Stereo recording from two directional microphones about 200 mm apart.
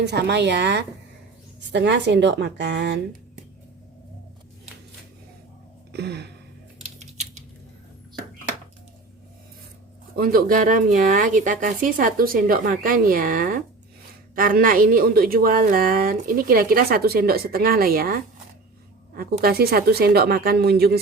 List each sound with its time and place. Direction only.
0.0 s a woman's voice: 55° right (ahead or behind)
5.9 s a sound: 55° right (ahead or behind)
10.2 s a woman's voice: 45° right (ahead or behind)